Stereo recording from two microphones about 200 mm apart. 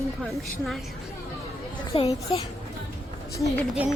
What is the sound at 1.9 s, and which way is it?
Speech, 25° left (ahead or behind).